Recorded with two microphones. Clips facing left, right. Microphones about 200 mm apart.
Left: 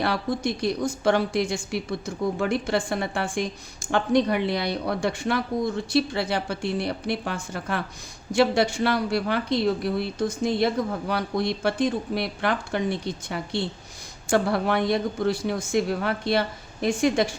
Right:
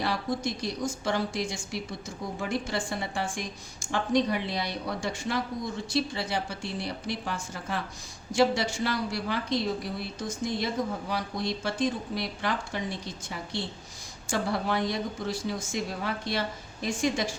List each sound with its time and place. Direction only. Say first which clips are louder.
0.0 s a woman's voice: left 4 dB; 65° left (ahead or behind)